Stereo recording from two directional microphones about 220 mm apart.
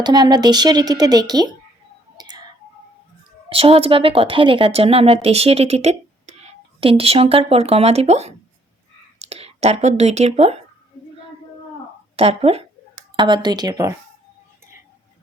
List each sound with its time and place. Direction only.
0.0 s speech: 20° right (ahead or behind)
2.1 s whispering: 20° right (ahead or behind)
3.5 s speech: 25° right (ahead or behind)
12.1 s speech: 25° right (ahead or behind)